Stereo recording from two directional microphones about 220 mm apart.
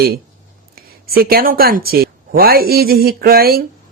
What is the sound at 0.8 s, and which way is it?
A man's voice, 45° right (ahead or behind).